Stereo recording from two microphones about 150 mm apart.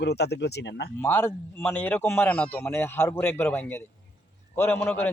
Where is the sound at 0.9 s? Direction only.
15° left (ahead or behind).